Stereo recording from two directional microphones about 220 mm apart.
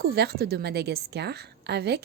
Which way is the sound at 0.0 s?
45° right (ahead or behind).